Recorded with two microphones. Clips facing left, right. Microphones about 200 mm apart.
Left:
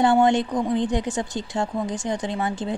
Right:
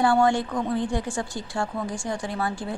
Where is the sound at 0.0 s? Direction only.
20° left (ahead or behind).